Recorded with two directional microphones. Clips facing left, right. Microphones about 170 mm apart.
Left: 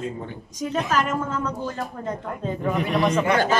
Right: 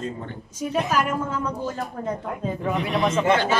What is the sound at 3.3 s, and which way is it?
Speech, 45° left (ahead or behind).